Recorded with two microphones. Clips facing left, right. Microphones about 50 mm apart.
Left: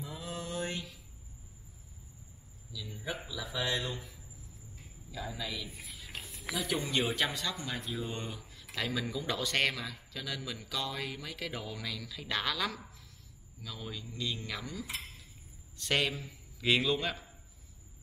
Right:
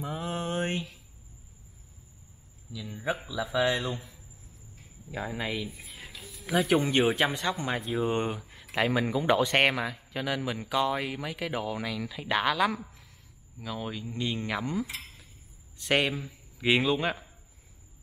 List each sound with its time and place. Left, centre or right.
0.0 s mantra: right
2.7 s a sound: right
3.6 s speech: right
5.1 s speech: right
6.1 s music: left
6.5 s a man's voice: right; by 17.2 s centre